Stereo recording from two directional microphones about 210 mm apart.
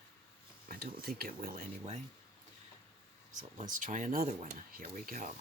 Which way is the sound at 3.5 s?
40° right (ahead or behind).